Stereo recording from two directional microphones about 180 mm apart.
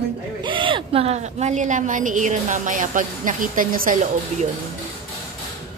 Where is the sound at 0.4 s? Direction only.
25° right (ahead or behind); by 4.5 s 50° right (ahead or behind).